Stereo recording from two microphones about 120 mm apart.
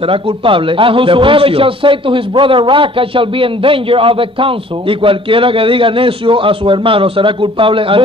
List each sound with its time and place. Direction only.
0.1 s a man's voice: 45° right (ahead or behind)